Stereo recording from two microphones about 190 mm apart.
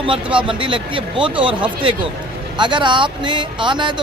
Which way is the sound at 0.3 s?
25° right (ahead or behind).